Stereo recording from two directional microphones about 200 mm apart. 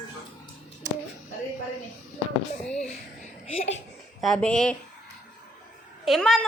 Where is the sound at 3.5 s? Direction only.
30° left (ahead or behind).